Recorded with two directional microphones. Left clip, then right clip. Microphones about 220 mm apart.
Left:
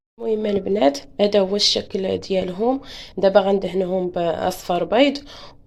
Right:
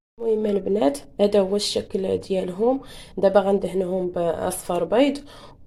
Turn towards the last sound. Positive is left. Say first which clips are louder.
# left 3 dB
turn(degrees=0)  # may be behind; listen again after turning